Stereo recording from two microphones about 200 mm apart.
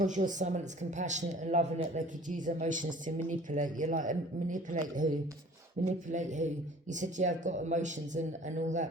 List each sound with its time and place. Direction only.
0.0 s speech: 40° right (ahead or behind)